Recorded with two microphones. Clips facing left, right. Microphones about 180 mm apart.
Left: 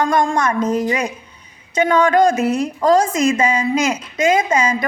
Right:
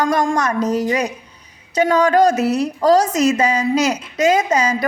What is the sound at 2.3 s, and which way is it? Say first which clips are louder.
Speech: even; 70° right (ahead or behind).